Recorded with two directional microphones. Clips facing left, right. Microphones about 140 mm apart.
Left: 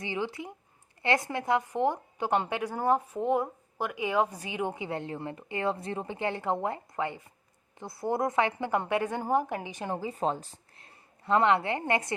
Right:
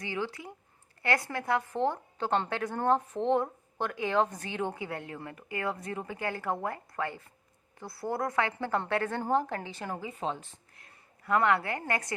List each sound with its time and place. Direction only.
0.0 s a woman's voice: 20° left (ahead or behind)
9.9 s a woman's voice: 35° left (ahead or behind)